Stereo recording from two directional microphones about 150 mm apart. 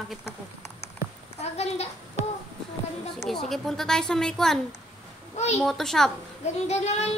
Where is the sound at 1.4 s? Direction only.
45° left (ahead or behind).